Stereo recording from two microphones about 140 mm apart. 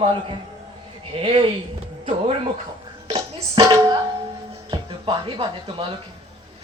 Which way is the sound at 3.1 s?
45° right (ahead or behind).